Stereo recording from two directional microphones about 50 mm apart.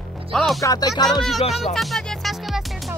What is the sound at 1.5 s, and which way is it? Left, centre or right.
Music, centre.